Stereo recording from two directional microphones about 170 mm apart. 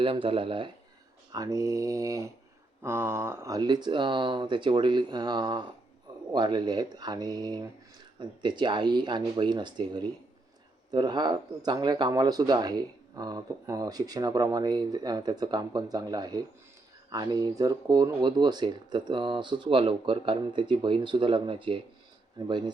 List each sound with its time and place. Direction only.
0.0 s speech: 30° right (ahead or behind)
1.3 s speech: 20° right (ahead or behind)